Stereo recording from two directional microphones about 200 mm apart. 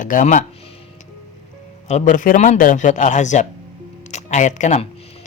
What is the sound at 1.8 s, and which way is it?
Speech, 40° left (ahead or behind).